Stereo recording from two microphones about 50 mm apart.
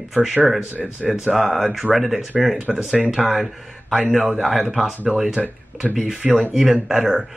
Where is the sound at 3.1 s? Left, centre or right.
Centre.